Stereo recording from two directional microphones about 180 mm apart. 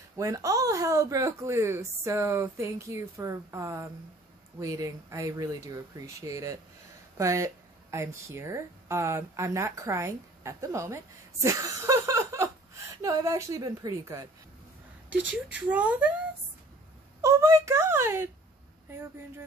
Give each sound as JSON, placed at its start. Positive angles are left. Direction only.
{"t": 0.2, "sound": "a woman's voice", "side_deg": -20}
{"t": 17.2, "sound": "a woman's voice", "side_deg": -15}